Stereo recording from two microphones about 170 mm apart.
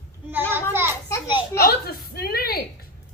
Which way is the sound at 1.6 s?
65° left (ahead or behind).